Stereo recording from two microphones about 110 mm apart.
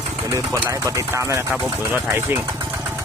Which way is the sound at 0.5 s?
30° right (ahead or behind).